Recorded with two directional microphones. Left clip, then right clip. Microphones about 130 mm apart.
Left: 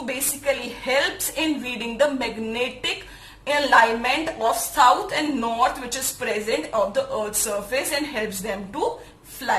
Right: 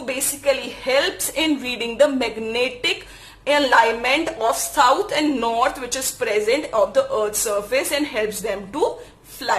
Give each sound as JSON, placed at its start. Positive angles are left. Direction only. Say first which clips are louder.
{"t": 0.9, "sound": "a woman's voice", "louder": "right 3 dB", "side_deg": -35}